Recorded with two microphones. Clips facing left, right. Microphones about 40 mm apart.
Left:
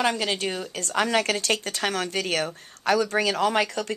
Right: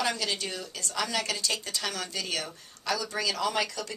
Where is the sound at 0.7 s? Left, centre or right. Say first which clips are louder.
Left 8 dB; left.